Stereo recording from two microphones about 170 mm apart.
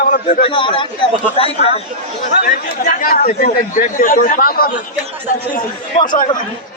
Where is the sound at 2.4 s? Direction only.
55° left (ahead or behind).